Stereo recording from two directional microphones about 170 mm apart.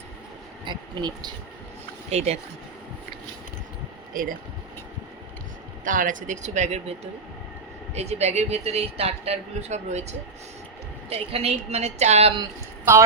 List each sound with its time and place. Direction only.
0.6 s speech: 25° right (ahead or behind)
2.0 s speech: 40° right (ahead or behind)
4.1 s speech: 55° right (ahead or behind)
5.8 s speech: 50° right (ahead or behind)
11.3 s speech: 35° right (ahead or behind)
12.4 s speech: 15° right (ahead or behind)